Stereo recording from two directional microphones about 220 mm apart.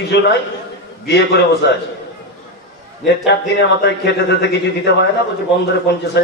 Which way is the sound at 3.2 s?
50° left (ahead or behind).